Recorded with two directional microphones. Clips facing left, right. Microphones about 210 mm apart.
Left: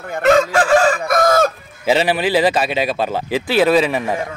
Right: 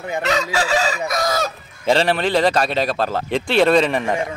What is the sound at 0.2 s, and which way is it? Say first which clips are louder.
Chicken: left 9 dB; 50° left (ahead or behind).